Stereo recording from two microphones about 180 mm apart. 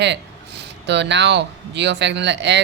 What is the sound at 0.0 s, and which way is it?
Speech, 75° right (ahead or behind).